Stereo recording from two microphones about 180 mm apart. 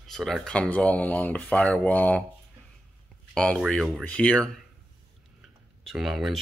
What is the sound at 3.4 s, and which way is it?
Speech, 5° left (ahead or behind).